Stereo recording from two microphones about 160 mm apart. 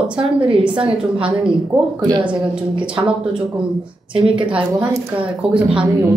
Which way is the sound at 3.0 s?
25° right (ahead or behind).